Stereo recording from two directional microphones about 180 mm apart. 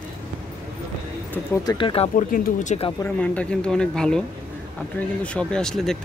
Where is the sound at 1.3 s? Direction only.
15° left (ahead or behind).